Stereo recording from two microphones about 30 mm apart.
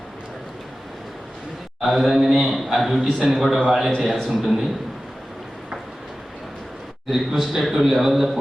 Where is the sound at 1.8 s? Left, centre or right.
Centre.